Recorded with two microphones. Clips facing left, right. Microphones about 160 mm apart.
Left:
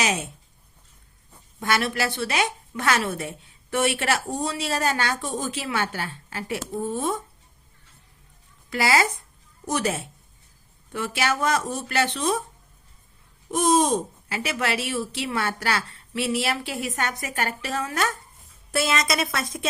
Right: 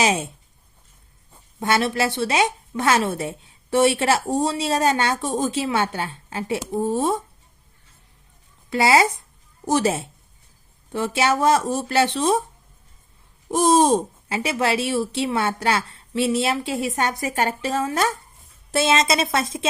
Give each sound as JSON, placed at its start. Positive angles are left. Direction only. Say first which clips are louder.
{"t": 0.0, "sound": "a woman's voice", "louder": "right 5 dB", "side_deg": -30}
{"t": 1.3, "sound": "a woman's voice", "louder": "right 3 dB", "side_deg": -25}
{"t": 8.7, "sound": "a woman's voice", "louder": "right 5 dB", "side_deg": -25}
{"t": 13.5, "sound": "a woman's voice", "louder": "right 4 dB", "side_deg": -30}